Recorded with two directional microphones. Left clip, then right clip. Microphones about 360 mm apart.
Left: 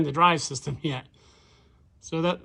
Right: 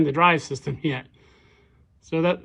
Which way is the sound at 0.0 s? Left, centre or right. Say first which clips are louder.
Right 2 dB; centre.